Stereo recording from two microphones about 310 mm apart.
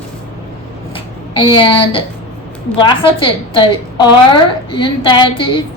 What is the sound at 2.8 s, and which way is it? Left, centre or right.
A woman's voice, centre.